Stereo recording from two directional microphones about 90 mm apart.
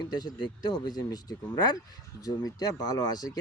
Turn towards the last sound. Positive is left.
turn(degrees=45)  # may be behind; listen again after turning